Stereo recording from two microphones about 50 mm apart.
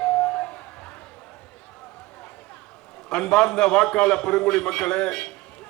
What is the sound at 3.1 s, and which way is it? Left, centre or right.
A man's voice, centre.